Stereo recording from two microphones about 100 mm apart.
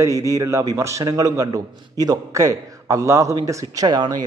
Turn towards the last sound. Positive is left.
turn(degrees=-45)  # may be behind; listen again after turning